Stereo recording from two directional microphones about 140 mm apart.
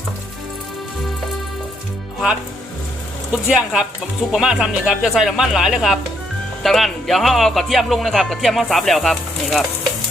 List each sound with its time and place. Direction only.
3.4 s speech: 5° right (ahead or behind)